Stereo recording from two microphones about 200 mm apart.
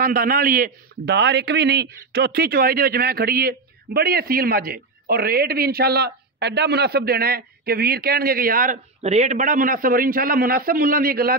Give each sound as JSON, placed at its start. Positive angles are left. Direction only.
{"t": 0.0, "sound": "a man's voice", "side_deg": -45}